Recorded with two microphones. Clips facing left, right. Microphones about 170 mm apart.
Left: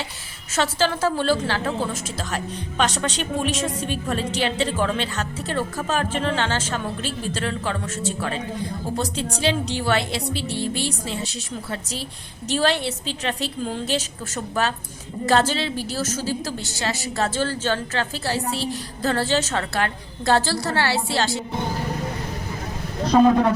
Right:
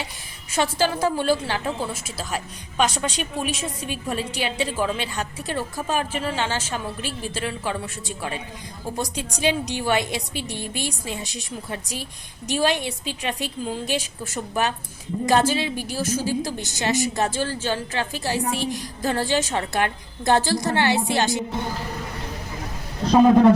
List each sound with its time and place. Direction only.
0.5 s a woman's voice: 15° right (ahead or behind)